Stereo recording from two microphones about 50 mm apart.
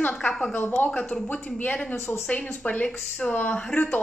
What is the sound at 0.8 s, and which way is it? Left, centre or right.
Speech, left.